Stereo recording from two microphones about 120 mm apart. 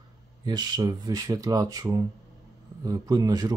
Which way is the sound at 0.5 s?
35° right (ahead or behind).